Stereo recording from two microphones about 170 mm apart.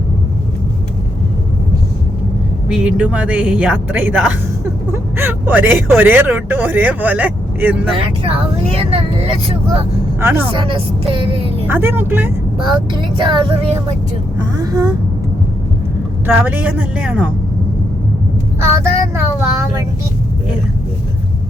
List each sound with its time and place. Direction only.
2.6 s speech: 5° right (ahead or behind)
7.9 s speech: 35° right (ahead or behind)
10.2 s speech: 15° right (ahead or behind)
10.5 s speech: 30° right (ahead or behind)
11.7 s speech: 10° right (ahead or behind)
12.5 s speech: 30° right (ahead or behind)
16.2 s speech: 10° right (ahead or behind)
18.6 s speech: 15° right (ahead or behind)